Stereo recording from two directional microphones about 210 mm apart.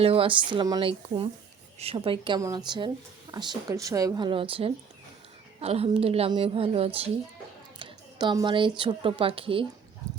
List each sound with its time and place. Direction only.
0.0 s a woman's voice: 25° right (ahead or behind)
7.8 s a sound: 20° right (ahead or behind)
8.8 s a woman's voice: 25° right (ahead or behind)